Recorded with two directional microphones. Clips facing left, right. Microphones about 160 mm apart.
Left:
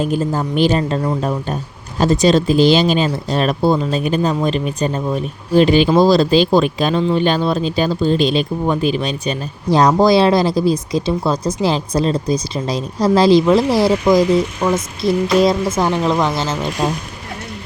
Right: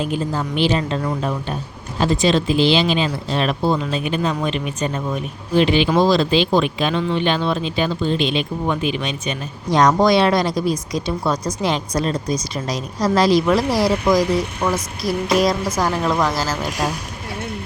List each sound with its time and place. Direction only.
0.0 s speech: 45° left (ahead or behind); by 16.6 s 25° left (ahead or behind)